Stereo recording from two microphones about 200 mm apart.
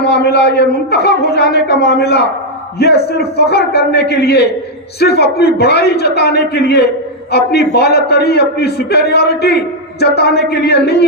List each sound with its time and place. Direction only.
0.0 s a man's voice: 55° left (ahead or behind)